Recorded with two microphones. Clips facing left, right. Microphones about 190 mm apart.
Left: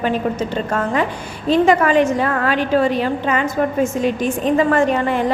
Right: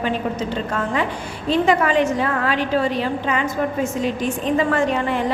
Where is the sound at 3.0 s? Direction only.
50° left (ahead or behind).